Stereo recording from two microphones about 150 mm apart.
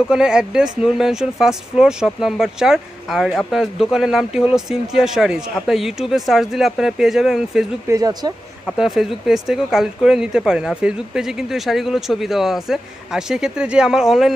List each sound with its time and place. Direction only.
0.1 s speech: 5° right (ahead or behind)
7.9 s speech: 25° right (ahead or behind)
8.7 s speech: 5° right (ahead or behind)